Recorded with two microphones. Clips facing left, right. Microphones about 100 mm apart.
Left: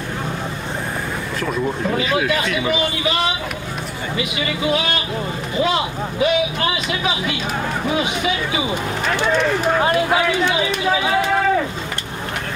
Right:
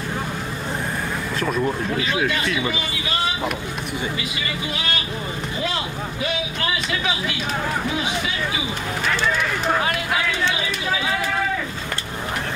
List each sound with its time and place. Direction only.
1.4 s speech: centre (ahead or behind)
2.7 s speech: 20° left (ahead or behind)
5.6 s speech: 20° left (ahead or behind)
7.9 s speech: 15° left (ahead or behind)
10.2 s speech: 20° left (ahead or behind)